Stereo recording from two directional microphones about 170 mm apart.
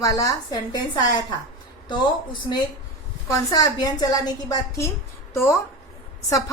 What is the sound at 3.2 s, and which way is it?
A woman's voice, 20° left (ahead or behind).